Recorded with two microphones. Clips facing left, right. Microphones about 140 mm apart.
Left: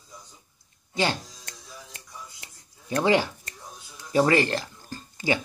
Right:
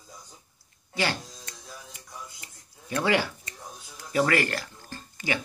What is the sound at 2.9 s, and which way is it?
Speech, 20° left (ahead or behind).